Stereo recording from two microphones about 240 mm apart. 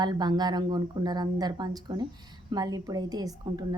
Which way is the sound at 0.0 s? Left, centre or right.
Centre.